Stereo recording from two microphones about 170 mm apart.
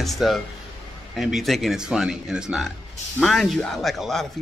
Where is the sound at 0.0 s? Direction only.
Centre (ahead or behind).